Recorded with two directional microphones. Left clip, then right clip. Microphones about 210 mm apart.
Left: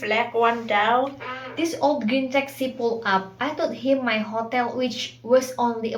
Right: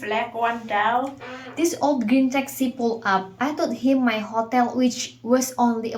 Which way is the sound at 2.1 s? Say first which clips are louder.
Right 1 dB; 35° right (ahead or behind).